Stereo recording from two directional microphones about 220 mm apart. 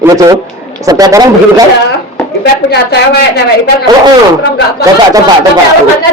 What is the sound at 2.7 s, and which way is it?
Speech, 50° left (ahead or behind).